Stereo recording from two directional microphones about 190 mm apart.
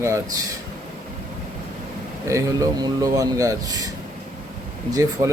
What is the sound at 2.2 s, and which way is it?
Speech, 15° right (ahead or behind).